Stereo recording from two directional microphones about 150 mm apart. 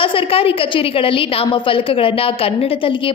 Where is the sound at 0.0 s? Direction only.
35° left (ahead or behind).